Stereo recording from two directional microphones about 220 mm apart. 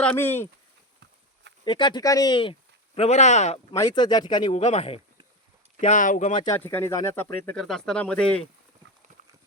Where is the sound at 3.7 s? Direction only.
20° left (ahead or behind); by 6.4 s 35° left (ahead or behind).